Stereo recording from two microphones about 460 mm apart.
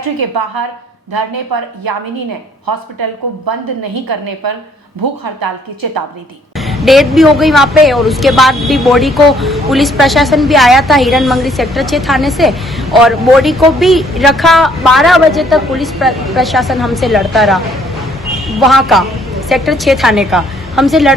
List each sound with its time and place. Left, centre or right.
0.2 s a woman's voice: right
6.6 s a woman's voice: centre